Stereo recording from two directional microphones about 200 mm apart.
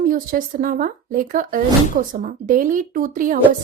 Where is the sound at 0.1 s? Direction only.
45° right (ahead or behind).